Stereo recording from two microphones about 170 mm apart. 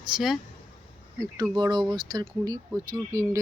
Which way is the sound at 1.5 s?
25° right (ahead or behind).